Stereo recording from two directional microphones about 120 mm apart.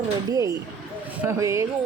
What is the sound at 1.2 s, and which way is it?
Speech, 25° right (ahead or behind).